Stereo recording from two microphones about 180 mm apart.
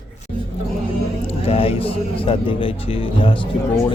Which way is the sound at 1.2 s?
30° left (ahead or behind).